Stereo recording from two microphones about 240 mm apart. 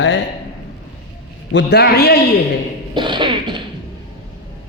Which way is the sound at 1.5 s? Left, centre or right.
Left.